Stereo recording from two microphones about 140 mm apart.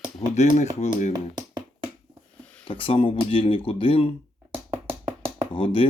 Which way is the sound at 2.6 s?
40° left (ahead or behind).